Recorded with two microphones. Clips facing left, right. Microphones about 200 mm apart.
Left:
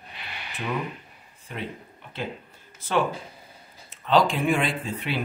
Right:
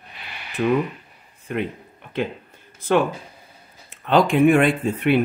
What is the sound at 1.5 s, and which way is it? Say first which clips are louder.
Speech: right 10 dB; 60° right (ahead or behind).